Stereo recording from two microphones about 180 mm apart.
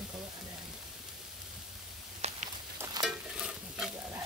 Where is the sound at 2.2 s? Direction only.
35° right (ahead or behind).